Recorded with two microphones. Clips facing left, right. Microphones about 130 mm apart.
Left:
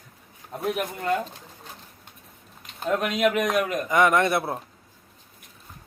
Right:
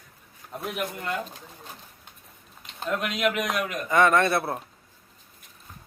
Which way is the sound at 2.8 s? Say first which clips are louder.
Left 3 dB; 45° left (ahead or behind).